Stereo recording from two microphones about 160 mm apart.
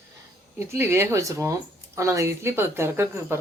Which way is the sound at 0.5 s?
15° right (ahead or behind).